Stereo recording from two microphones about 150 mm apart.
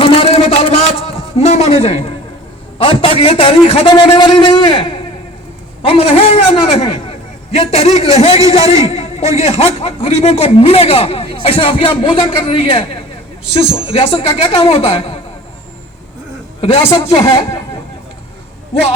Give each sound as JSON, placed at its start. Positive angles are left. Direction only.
{"t": 0.0, "sound": "a sound", "side_deg": 35}
{"t": 2.7, "sound": "a man's voice", "side_deg": 40}
{"t": 16.6, "sound": "a man's voice", "side_deg": 40}